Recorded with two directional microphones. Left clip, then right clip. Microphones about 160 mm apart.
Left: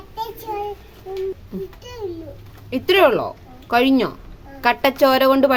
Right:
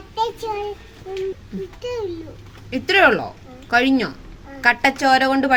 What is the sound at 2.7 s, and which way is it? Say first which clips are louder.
A woman's voice: even; 40° left (ahead or behind).